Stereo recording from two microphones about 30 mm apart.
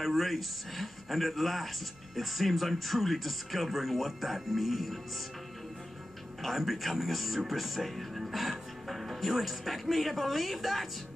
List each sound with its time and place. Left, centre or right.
0.0 s speech: centre
6.4 s speech: centre